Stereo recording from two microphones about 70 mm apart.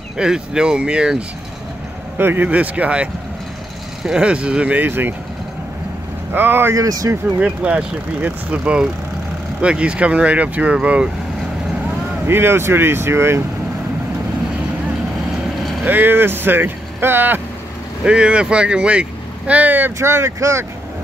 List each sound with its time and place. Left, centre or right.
0.2 s speech: centre
2.1 s speech: right
4.8 s speech: right
6.3 s speech: right
6.7 s speech: right
7.3 s speech: centre
12.3 s speech: right
15.8 s speech: right
18.0 s speech: centre
20.0 s speech: right